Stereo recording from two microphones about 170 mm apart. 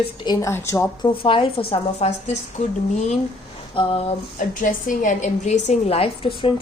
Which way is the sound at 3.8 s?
35° left (ahead or behind).